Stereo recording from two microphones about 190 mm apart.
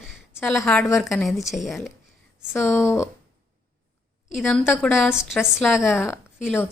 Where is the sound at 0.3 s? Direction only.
Centre (ahead or behind).